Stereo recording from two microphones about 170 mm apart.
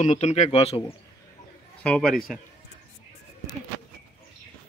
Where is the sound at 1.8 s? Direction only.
5° left (ahead or behind).